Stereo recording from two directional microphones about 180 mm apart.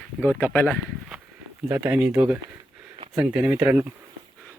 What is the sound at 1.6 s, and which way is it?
Speech, 10° right (ahead or behind).